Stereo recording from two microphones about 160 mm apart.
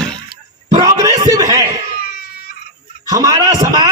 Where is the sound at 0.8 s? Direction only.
20° right (ahead or behind).